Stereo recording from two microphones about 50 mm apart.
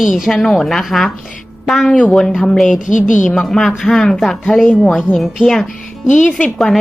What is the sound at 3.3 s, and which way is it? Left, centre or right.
A woman's voice, centre.